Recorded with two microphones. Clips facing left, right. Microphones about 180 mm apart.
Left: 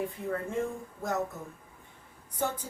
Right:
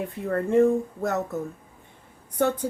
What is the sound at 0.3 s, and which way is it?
Speech, 65° right (ahead or behind).